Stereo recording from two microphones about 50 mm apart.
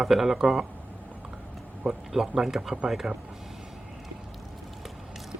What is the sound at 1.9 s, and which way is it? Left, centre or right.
Speech, centre.